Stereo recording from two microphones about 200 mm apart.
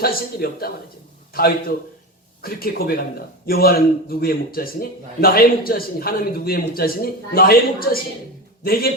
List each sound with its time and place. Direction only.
0.0 s speech: 50° left (ahead or behind)